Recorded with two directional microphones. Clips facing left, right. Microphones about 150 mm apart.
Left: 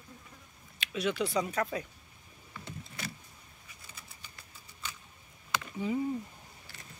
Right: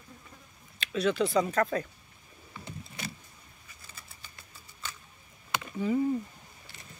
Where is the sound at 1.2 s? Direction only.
10° left (ahead or behind).